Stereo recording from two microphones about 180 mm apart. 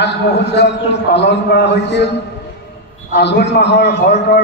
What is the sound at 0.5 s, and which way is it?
A man's voice, 70° left (ahead or behind).